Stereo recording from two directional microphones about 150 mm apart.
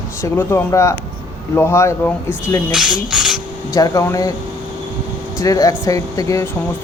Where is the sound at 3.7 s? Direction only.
25° left (ahead or behind).